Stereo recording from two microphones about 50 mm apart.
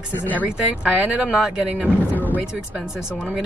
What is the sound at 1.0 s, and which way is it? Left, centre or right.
Speech, right.